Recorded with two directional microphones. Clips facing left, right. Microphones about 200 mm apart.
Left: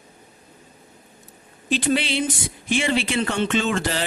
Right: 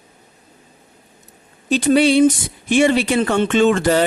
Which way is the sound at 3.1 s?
50° right (ahead or behind).